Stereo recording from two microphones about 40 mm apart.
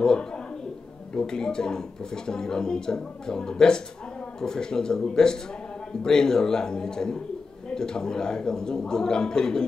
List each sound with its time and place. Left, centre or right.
0.0 s speech: centre